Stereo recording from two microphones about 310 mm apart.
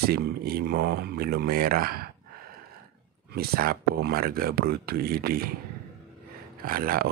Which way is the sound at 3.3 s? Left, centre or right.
Right.